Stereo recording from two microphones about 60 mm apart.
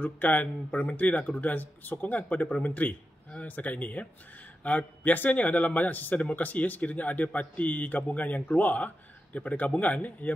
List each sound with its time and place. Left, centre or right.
0.0 s speech: left